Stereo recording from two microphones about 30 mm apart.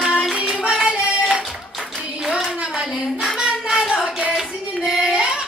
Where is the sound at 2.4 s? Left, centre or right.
Right.